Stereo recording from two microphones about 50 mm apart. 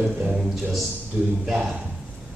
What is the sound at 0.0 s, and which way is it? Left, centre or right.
Speech, right.